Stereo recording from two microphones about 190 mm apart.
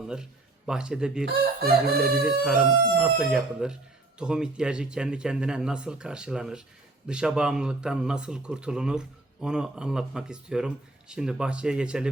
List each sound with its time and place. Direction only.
0.7 s speech: 5° right (ahead or behind)
1.2 s fowl: 55° right (ahead or behind)
2.2 s speech: 5° right (ahead or behind)